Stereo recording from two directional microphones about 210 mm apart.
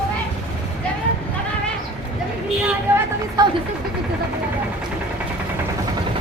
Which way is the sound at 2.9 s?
10° right (ahead or behind).